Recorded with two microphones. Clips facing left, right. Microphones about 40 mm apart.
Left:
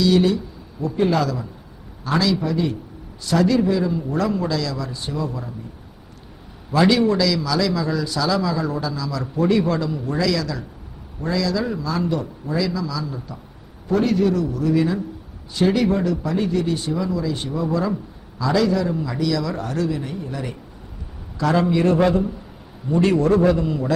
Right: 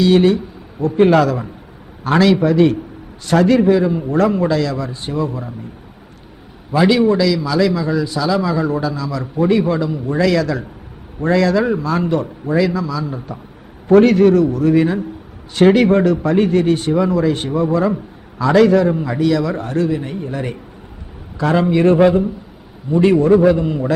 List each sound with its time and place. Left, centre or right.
0.0 s a man's voice: right
6.7 s a man's voice: centre
8.4 s a man's voice: right
9.3 s a man's voice: right
10.2 s a man's voice: right
21.3 s a man's voice: right
23.6 s a man's voice: right